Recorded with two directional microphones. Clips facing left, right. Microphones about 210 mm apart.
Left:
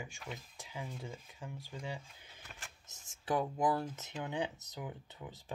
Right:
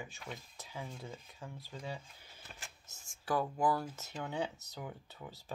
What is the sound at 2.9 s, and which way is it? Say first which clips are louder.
Speech: left 1 dB; 20° left (ahead or behind).